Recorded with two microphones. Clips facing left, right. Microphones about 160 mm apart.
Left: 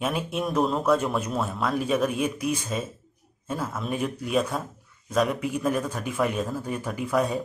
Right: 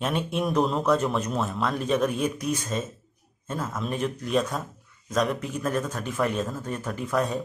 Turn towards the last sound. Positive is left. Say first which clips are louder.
# left 1 dB
turn(degrees=5)  # may be behind; listen again after turning